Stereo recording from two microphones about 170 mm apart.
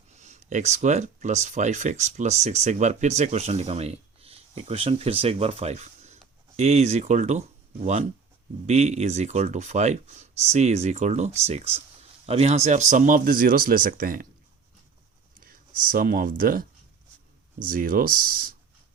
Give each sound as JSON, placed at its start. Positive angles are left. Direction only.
{"t": 0.1, "sound": "speech", "side_deg": -40}
{"t": 15.4, "sound": "speech", "side_deg": -55}